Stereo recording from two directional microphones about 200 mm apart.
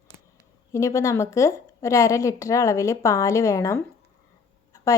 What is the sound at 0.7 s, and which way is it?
Speech, 15° left (ahead or behind).